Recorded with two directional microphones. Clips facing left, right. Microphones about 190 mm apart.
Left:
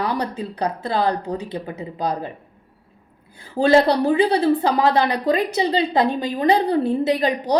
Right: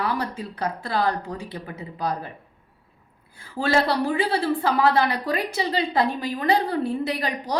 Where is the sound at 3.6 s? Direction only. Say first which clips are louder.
Left 7 dB; 25° left (ahead or behind).